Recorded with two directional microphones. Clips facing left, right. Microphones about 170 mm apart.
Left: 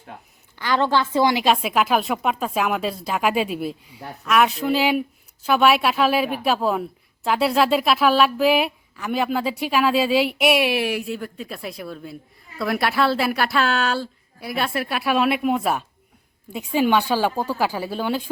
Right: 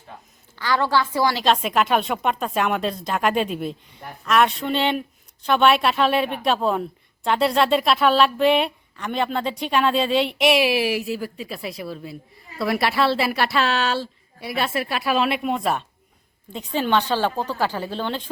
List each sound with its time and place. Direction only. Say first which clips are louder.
0.6 s a woman's voice: left 1 dB; 20° left (ahead or behind)
1.5 s a woman's voice: even; centre (ahead or behind)